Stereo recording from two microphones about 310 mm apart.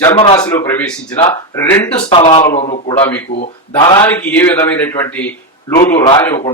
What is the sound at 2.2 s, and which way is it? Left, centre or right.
Speech, left.